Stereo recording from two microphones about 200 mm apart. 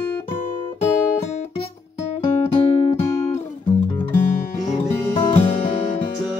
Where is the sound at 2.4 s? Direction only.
30° left (ahead or behind).